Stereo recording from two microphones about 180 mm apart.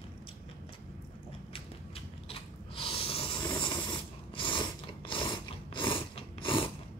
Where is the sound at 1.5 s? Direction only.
30° left (ahead or behind).